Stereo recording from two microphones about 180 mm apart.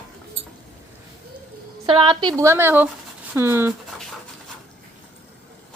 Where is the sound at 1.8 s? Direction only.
30° right (ahead or behind).